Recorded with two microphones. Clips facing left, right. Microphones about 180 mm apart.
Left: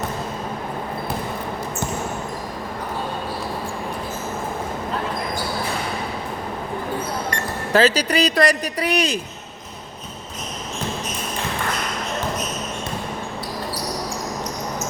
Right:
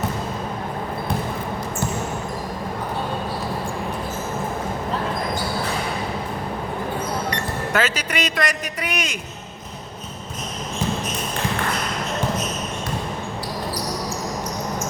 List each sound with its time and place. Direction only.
7.7 s speech: 35° left (ahead or behind)